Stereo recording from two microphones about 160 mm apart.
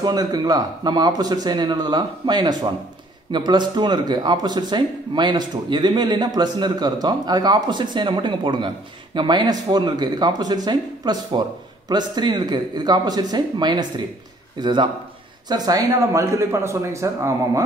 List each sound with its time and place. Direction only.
0.0 s speech: 25° right (ahead or behind)